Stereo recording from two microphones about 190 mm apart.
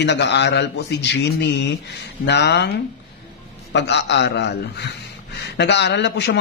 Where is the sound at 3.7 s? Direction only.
65° left (ahead or behind).